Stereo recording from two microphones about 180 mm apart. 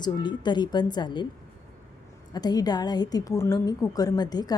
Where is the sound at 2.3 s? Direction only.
20° left (ahead or behind).